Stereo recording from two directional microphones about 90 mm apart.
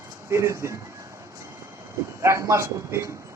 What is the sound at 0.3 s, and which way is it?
Speech, 35° right (ahead or behind).